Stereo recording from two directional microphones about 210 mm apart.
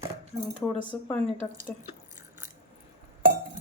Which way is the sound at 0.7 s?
5° right (ahead or behind).